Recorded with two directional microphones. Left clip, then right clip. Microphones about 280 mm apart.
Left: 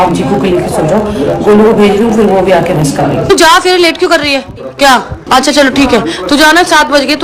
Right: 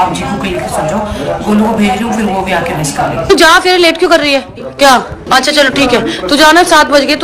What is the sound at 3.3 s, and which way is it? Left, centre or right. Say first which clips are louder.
A man's voice: even; centre.